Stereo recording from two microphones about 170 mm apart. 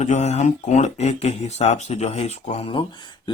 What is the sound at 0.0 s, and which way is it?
A man's voice, 40° left (ahead or behind).